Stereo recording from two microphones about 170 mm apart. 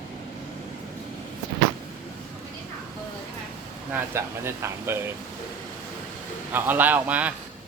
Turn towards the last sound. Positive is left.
turn(degrees=-10)  # may be behind; listen again after turning